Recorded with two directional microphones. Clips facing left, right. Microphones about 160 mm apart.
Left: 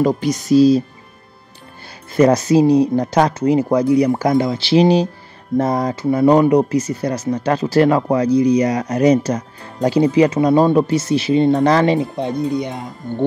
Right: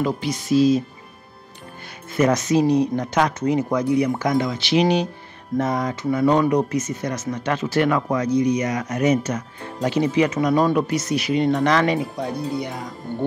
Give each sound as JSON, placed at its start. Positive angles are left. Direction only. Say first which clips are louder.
{"t": 0.0, "sound": "speech", "louder": "left 7 dB", "side_deg": 40}
{"t": 2.1, "sound": "speech", "louder": "left 6 dB", "side_deg": 35}